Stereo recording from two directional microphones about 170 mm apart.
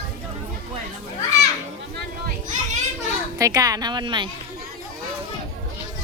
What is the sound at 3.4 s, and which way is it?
Speech, 20° right (ahead or behind).